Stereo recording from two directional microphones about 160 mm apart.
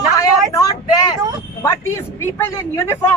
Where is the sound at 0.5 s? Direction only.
20° left (ahead or behind).